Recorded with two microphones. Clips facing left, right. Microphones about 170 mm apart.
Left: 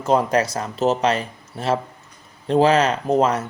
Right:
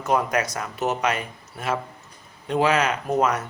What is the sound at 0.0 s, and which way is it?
A man's voice, 30° left (ahead or behind).